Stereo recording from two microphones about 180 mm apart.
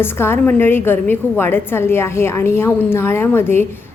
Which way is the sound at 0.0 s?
15° left (ahead or behind).